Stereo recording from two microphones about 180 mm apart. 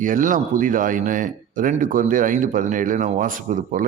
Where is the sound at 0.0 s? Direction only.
45° right (ahead or behind).